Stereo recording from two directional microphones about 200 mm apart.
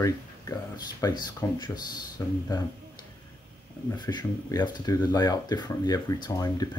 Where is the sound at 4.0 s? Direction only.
20° left (ahead or behind).